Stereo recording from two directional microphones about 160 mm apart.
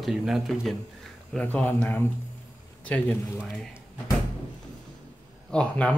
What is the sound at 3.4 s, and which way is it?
Speech, 5° right (ahead or behind).